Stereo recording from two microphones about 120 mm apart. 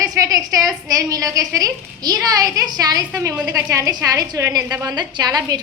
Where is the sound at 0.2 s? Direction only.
30° right (ahead or behind).